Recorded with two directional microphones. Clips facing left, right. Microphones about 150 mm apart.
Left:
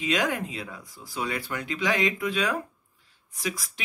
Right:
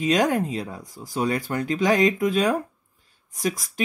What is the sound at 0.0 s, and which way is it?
Speech, 45° right (ahead or behind).